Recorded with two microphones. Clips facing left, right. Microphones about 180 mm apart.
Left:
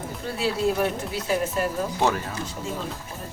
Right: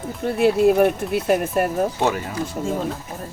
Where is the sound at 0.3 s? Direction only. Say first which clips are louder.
Right 9 dB; 55° right (ahead or behind).